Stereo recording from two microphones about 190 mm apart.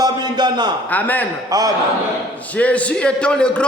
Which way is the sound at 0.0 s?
20° right (ahead or behind).